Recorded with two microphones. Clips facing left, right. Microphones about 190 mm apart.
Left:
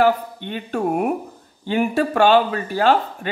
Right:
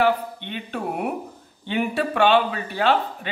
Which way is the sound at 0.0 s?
45° left (ahead or behind).